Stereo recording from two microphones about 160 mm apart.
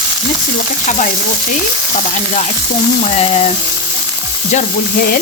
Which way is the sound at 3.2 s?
40° left (ahead or behind).